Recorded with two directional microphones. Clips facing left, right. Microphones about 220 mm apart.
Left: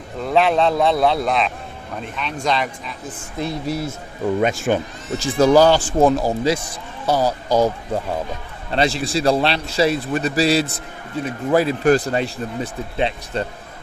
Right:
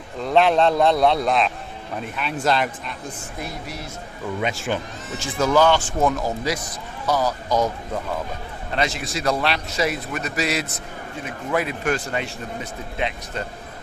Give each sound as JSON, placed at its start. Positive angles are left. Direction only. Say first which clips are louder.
{"t": 0.2, "sound": "a man's voice", "louder": "even", "side_deg": 0}
{"t": 4.4, "sound": "speech", "louder": "left 5 dB", "side_deg": 45}
{"t": 5.2, "sound": "a man's voice", "louder": "left 5 dB", "side_deg": 35}
{"t": 8.7, "sound": "a man's voice", "louder": "left 6 dB", "side_deg": 30}